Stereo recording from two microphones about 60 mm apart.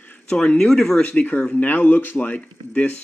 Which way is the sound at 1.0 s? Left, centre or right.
Left.